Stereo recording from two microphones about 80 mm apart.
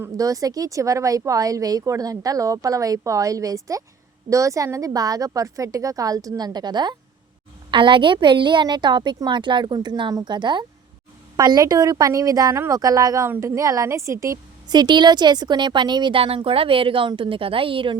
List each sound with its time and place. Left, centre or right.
0.2 s speech: right
7.7 s a woman's voice: right
11.3 s speech: right
13.2 s a woman's voice: right
14.7 s a woman's voice: right
16.6 s a woman's voice: right